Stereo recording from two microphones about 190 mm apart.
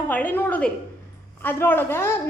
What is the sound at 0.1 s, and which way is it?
A woman's voice, 10° left (ahead or behind).